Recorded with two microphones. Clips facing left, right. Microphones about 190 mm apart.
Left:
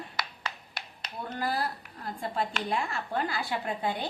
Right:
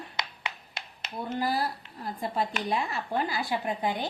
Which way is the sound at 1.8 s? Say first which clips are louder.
Right 2 dB; 20° right (ahead or behind).